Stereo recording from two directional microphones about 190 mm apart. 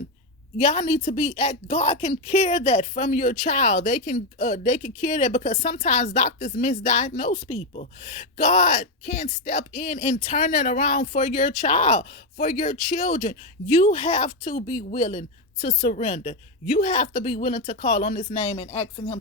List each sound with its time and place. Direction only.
0.6 s a woman's voice: 35° left (ahead or behind)
7.8 s a woman's voice: 35° left (ahead or behind)